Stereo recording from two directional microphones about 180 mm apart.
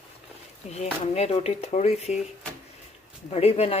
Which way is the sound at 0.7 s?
35° left (ahead or behind).